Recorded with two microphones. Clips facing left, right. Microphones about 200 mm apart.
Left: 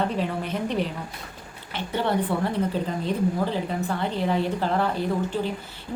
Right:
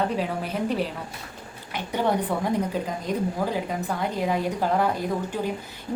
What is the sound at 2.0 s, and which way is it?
A woman's voice, 10° right (ahead or behind).